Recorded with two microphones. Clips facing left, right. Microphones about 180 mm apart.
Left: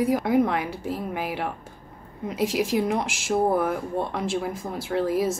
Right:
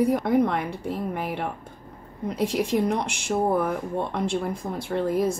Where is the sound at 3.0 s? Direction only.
90° left.